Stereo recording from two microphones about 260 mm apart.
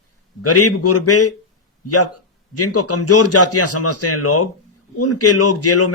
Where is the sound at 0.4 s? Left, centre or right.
Left.